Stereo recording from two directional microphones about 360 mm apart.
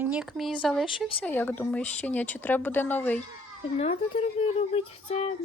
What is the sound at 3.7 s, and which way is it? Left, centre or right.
Speech, centre.